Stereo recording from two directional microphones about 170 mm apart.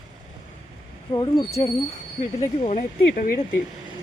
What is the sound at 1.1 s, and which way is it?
Speech, 25° left (ahead or behind).